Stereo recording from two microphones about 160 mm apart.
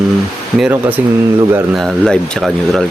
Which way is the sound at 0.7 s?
10° right (ahead or behind).